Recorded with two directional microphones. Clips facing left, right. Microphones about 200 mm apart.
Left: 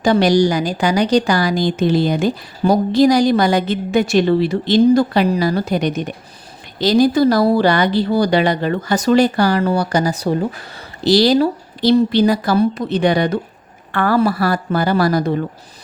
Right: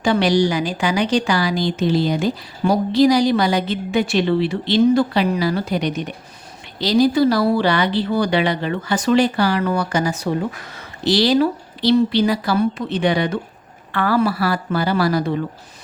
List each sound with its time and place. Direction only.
0.0 s a woman's voice: 40° left (ahead or behind)